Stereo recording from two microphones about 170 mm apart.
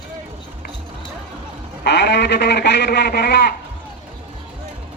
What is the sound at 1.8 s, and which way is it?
Speech, 75° left (ahead or behind).